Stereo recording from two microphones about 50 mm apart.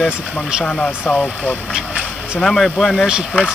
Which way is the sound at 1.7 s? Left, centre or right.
Centre.